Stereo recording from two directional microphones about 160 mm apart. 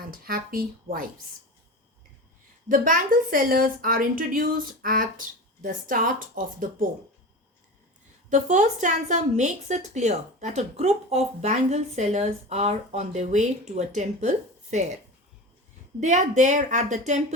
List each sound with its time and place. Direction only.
0.0 s a woman's voice: 65° right (ahead or behind)
2.6 s a woman's voice: 55° right (ahead or behind)
8.3 s a woman's voice: 50° right (ahead or behind)
16.0 s a woman's voice: 45° right (ahead or behind)